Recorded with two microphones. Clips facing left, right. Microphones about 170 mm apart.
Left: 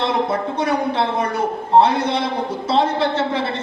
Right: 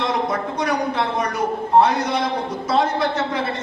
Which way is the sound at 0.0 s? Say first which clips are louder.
Left 2 dB; 30° left (ahead or behind).